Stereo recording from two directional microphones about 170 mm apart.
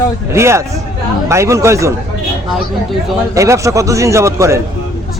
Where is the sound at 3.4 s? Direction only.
20° right (ahead or behind).